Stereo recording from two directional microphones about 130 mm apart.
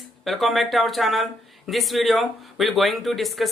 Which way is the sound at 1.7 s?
Centre (ahead or behind).